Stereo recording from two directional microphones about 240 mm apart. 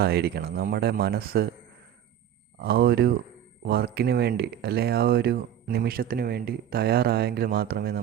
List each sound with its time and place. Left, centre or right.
0.0 s speech: right
2.6 s speech: right